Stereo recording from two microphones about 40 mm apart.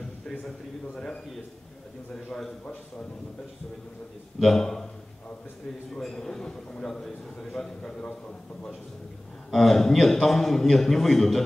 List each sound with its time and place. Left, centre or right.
0.9 s a man's voice: centre
4.4 s a man's voice: centre
5.9 s a man's voice: centre
9.5 s a man's voice: centre